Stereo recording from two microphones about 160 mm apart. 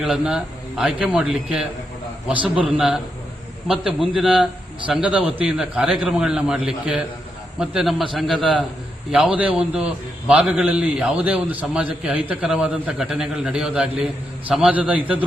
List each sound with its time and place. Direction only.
0.0 s a man's voice: 5° right (ahead or behind)
4.1 s a man's voice: 5° right (ahead or behind)